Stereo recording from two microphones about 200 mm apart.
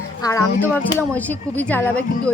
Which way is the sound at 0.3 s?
10° left (ahead or behind).